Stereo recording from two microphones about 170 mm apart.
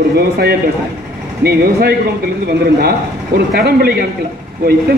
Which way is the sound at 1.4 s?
65° right (ahead or behind).